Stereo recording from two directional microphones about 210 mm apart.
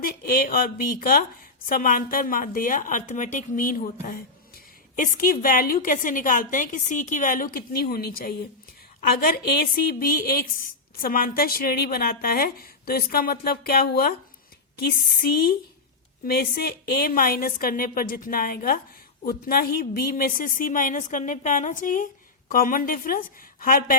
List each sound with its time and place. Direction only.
0.0 s a woman's voice: 45° left (ahead or behind)